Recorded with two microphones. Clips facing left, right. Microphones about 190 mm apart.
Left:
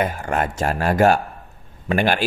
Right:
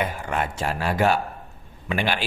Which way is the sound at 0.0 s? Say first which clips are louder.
Left 4 dB; 45° left (ahead or behind).